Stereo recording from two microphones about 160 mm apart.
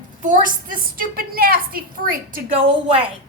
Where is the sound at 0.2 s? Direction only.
55° right (ahead or behind).